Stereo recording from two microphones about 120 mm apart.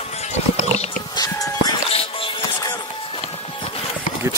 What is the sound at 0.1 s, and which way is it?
Music, 65° left (ahead or behind).